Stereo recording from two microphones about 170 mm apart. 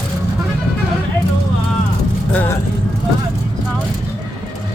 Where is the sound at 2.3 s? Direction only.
10° left (ahead or behind).